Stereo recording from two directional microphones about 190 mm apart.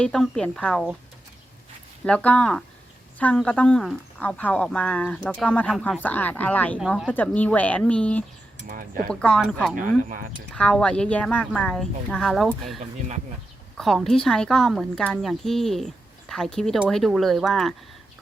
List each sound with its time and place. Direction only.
0.0 s speech: 5° left (ahead or behind)
2.0 s speech: 5° left (ahead or behind)
6.7 s speech: 5° right (ahead or behind)
7.1 s speech: 10° left (ahead or behind)
9.7 s speech: 45° right (ahead or behind)
10.5 s speech: 5° left (ahead or behind)
13.7 s speech: centre (ahead or behind)